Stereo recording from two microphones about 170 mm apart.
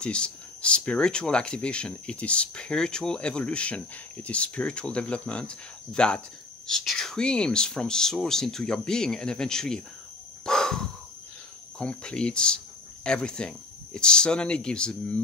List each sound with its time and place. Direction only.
0.0 s speech: 5° left (ahead or behind)
10.4 s crow: 5° left (ahead or behind)
11.8 s speech: 5° left (ahead or behind)